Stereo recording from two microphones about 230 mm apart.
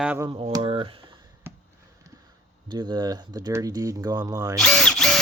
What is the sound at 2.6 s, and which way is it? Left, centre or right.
Speech, centre.